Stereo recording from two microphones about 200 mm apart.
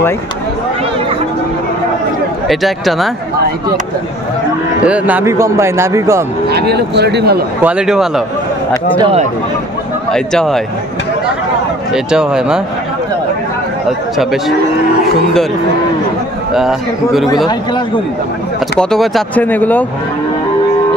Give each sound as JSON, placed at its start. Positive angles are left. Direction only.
{"t": 2.4, "sound": "speech", "side_deg": 0}
{"t": 4.8, "sound": "a man's voice", "side_deg": -5}
{"t": 6.5, "sound": "speech", "side_deg": -55}
{"t": 7.6, "sound": "speech", "side_deg": -5}
{"t": 9.0, "sound": "speech", "side_deg": -30}
{"t": 10.1, "sound": "speech", "side_deg": 0}
{"t": 11.9, "sound": "speech", "side_deg": -5}
{"t": 16.5, "sound": "speech", "side_deg": 0}
{"t": 18.8, "sound": "speech", "side_deg": 0}